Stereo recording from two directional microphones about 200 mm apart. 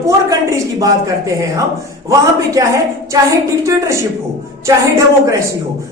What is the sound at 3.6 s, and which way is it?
Speech, 15° right (ahead or behind).